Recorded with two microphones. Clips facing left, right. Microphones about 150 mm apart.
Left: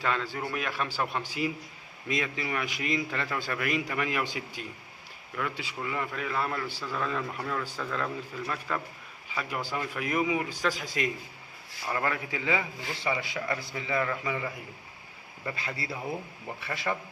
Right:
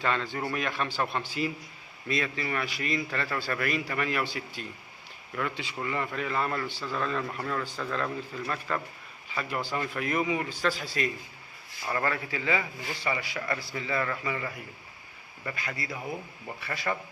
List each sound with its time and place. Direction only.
0.0 s a man's voice: 5° left (ahead or behind)
5.4 s a man's voice: 5° left (ahead or behind)
15.5 s a man's voice: 30° left (ahead or behind)
16.6 s a man's voice: 20° left (ahead or behind)